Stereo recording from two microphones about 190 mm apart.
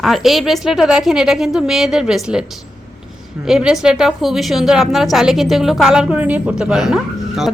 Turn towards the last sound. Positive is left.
turn(degrees=0)  # may be behind; listen again after turning